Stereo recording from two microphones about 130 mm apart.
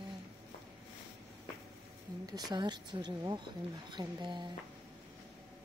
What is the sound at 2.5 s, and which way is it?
Speech, 35° right (ahead or behind).